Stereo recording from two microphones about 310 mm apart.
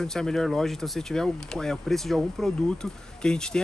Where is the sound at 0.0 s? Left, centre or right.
Centre.